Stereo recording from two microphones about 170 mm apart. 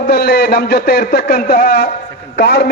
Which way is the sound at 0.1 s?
65° left (ahead or behind).